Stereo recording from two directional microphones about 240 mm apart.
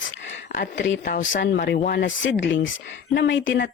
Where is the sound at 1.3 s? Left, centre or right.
Left.